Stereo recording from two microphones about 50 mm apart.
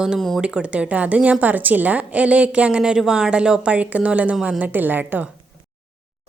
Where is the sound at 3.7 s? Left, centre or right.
Right.